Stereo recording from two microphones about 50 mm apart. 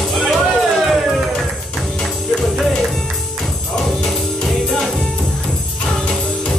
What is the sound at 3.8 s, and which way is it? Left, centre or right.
Music, centre.